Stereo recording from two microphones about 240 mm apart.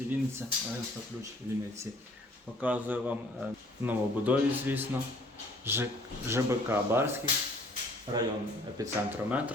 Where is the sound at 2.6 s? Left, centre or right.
Centre.